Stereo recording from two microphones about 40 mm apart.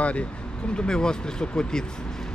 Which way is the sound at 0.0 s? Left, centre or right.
Left.